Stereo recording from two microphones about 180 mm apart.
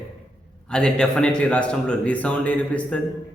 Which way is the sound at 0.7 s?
5° left (ahead or behind).